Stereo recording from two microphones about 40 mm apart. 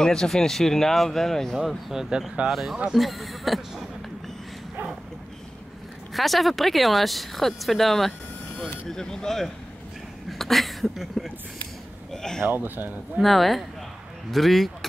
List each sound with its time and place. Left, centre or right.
0.0 s speech: centre
2.1 s speech: centre
6.1 s speech: centre
12.1 s a sound: centre
12.4 s speech: right
13.2 s speech: centre